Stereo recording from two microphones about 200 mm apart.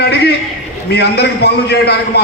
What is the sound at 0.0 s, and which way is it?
A man's voice, 55° left (ahead or behind).